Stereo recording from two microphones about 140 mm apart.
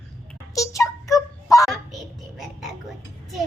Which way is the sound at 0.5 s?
25° left (ahead or behind).